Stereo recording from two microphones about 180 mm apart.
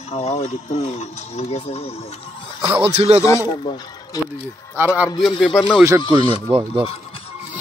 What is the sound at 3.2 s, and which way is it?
Speech, 20° left (ahead or behind).